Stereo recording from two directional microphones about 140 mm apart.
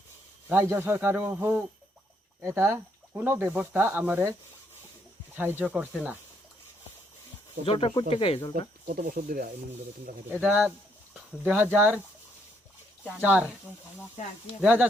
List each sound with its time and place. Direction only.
0.5 s speech: 15° right (ahead or behind)
5.4 s speech: 15° right (ahead or behind)
7.6 s speech: 40° left (ahead or behind)
8.5 s speech: 85° right
10.4 s speech: 10° right (ahead or behind)
13.1 s speech: 10° right (ahead or behind)
14.6 s speech: 10° right (ahead or behind)